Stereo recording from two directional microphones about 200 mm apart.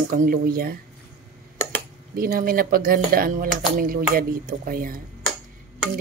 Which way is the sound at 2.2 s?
45° right (ahead or behind).